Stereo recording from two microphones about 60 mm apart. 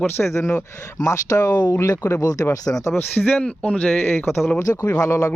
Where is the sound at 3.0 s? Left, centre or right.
Left.